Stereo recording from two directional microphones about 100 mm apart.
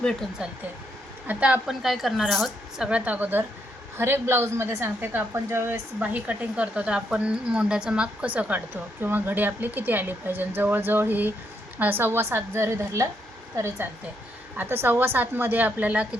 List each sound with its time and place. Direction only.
0.0 s speech: 10° left (ahead or behind)
1.3 s a woman's voice: 10° right (ahead or behind)
1.6 s a woman's voice: centre (ahead or behind); by 5.6 s 25° right (ahead or behind)
6.0 s a woman's voice: 15° right (ahead or behind); by 13.1 s 30° right (ahead or behind)
14.5 s a woman's voice: 20° right (ahead or behind)